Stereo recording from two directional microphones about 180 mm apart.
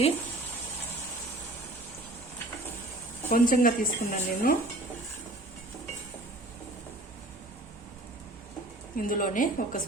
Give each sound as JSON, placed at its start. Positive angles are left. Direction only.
{"t": 3.2, "sound": "speech", "side_deg": 50}
{"t": 9.0, "sound": "speech", "side_deg": 50}